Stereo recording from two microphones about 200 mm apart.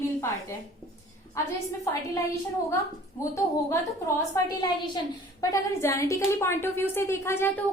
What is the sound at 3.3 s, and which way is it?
A woman's voice, 15° left (ahead or behind).